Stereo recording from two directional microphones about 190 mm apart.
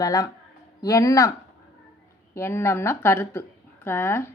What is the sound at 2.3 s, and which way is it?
Speech, 15° left (ahead or behind).